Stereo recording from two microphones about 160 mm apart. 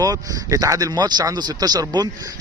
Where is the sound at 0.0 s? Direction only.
25° right (ahead or behind).